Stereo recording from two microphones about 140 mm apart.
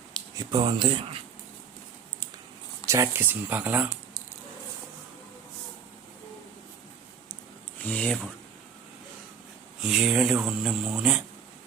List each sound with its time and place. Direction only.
0.3 s speech: 30° right (ahead or behind)
2.8 s speech: 20° right (ahead or behind)
7.9 s speech: 10° left (ahead or behind)
9.8 s speech: 5° right (ahead or behind)